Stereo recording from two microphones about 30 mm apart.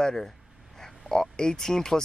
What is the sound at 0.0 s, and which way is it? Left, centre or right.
Speech, centre.